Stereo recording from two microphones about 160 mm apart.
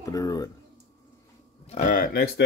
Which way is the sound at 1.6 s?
55° left (ahead or behind).